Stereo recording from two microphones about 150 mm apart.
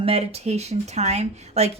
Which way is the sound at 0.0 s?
40° right (ahead or behind).